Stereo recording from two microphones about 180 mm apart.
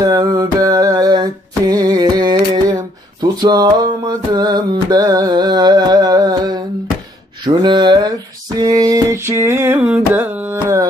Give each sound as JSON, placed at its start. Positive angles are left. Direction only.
{"t": 0.0, "sound": "music", "side_deg": -20}
{"t": 7.4, "sound": "a sound", "side_deg": -25}
{"t": 8.5, "sound": "carnatic music", "side_deg": -20}